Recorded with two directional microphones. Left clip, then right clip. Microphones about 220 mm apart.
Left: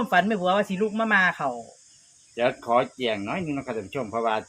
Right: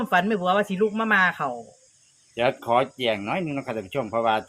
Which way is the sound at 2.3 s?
55° right (ahead or behind).